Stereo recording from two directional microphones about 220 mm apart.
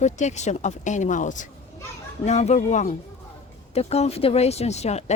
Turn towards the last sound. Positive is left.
turn(degrees=30)  # may be behind; listen again after turning